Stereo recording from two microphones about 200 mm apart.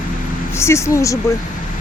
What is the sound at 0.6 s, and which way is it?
Speech, 15° left (ahead or behind).